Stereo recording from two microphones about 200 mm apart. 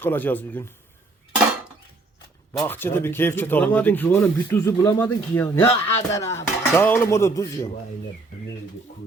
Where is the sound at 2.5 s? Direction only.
10° left (ahead or behind).